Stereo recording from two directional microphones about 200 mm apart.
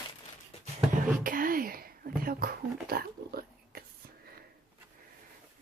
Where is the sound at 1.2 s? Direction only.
45° right (ahead or behind).